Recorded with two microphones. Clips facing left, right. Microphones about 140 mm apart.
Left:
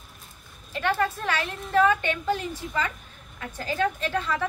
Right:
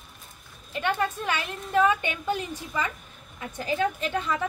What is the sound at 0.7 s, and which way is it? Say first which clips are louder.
A woman's voice: left 1 dB; 15° right (ahead or behind).